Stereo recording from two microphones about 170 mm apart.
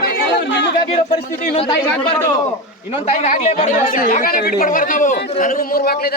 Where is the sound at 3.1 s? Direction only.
45° left (ahead or behind).